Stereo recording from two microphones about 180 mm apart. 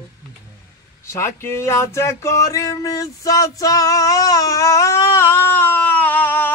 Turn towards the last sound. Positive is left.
turn(degrees=10)  # may be behind; listen again after turning